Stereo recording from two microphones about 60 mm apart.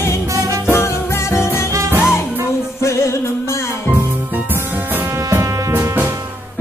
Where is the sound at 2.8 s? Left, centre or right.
Left.